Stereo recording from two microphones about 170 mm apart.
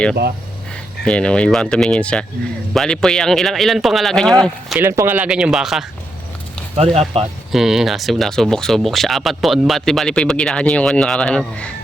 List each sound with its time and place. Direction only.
1.0 s speech: 5° left (ahead or behind)
4.8 s speech: 15° right (ahead or behind)
6.7 s speech: 40° right (ahead or behind)
7.5 s speech: centre (ahead or behind)